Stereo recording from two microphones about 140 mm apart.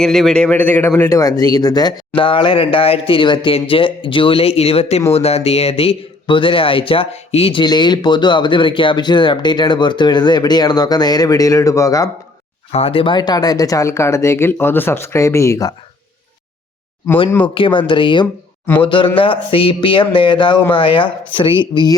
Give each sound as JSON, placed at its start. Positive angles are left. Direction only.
{"t": 0.0, "sound": "a man's voice", "side_deg": 5}
{"t": 7.6, "sound": "speech", "side_deg": 30}
{"t": 12.7, "sound": "speech", "side_deg": 45}
{"t": 17.4, "sound": "speech", "side_deg": 35}
{"t": 18.6, "sound": "a man's voice", "side_deg": 15}
{"t": 18.9, "sound": "speech", "side_deg": 35}